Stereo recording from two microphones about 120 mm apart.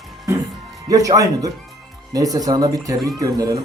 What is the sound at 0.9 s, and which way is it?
Speech, 30° right (ahead or behind).